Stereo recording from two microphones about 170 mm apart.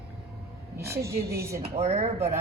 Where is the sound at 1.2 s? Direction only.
70° right (ahead or behind).